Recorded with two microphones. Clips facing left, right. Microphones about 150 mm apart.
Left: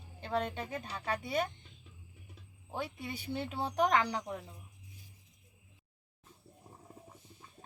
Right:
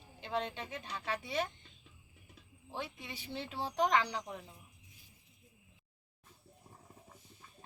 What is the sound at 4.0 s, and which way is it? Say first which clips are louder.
Speech: left 3 dB; 50° left (ahead or behind).